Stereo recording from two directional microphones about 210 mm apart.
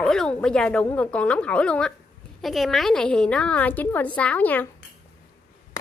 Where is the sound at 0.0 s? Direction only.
5° left (ahead or behind).